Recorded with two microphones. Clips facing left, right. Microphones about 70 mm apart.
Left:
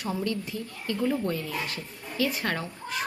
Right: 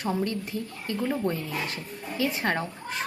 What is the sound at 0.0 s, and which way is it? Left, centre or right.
Speech, right.